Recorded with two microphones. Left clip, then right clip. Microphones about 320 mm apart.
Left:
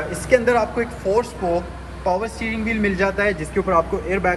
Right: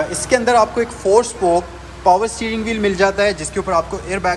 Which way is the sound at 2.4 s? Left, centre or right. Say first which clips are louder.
Right 3 dB; right.